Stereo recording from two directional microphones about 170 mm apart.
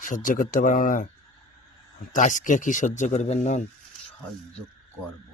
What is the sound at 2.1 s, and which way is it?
Speech, 50° left (ahead or behind).